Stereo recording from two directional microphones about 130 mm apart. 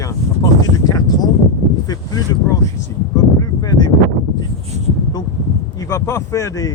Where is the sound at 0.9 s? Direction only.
30° left (ahead or behind).